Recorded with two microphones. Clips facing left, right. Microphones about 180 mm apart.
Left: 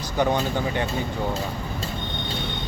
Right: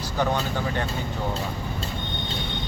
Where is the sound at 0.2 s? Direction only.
15° left (ahead or behind).